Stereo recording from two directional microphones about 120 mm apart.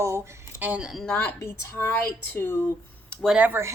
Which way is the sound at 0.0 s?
25° right (ahead or behind).